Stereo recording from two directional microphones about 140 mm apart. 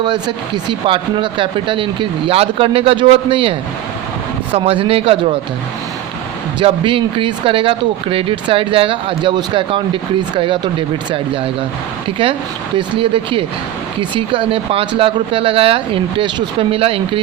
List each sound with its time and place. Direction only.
0.0 s speech: 35° right (ahead or behind)
4.5 s a man's voice: 45° right (ahead or behind)
6.6 s speech: 40° right (ahead or behind)
12.7 s speech: 40° right (ahead or behind)